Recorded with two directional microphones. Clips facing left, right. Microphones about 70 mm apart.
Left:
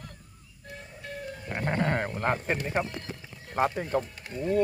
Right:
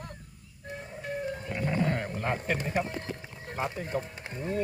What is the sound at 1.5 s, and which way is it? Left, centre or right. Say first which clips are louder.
Speech: left 3 dB; left.